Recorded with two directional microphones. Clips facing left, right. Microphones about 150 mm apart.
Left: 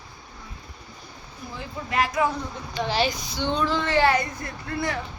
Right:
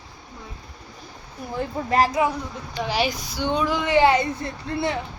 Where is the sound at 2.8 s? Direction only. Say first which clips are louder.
Even; 10° right (ahead or behind).